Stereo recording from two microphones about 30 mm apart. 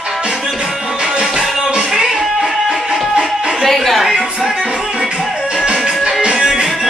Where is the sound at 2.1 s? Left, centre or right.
Centre.